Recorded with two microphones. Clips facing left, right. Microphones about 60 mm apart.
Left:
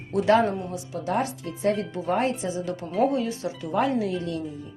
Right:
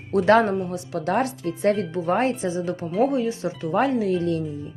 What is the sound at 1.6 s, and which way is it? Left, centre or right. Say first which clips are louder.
Speech: right 3 dB; right.